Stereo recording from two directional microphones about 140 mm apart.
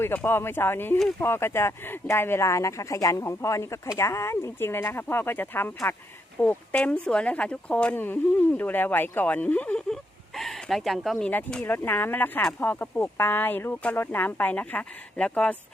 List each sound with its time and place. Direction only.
0.0 s speech: 15° left (ahead or behind)
11.3 s speech: 15° left (ahead or behind)